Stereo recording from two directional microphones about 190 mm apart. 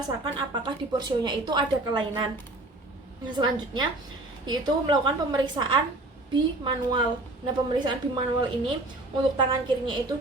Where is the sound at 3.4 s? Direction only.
20° right (ahead or behind).